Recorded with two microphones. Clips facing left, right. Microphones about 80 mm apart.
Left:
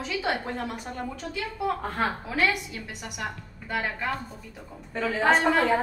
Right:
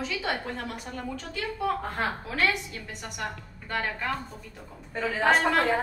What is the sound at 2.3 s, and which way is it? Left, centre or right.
A woman's voice, centre.